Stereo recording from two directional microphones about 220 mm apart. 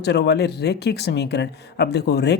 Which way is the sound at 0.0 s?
50° left (ahead or behind).